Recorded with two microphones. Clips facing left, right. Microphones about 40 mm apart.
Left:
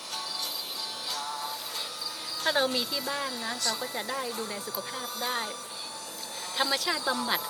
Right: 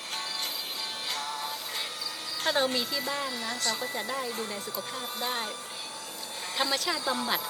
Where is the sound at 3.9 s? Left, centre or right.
Centre.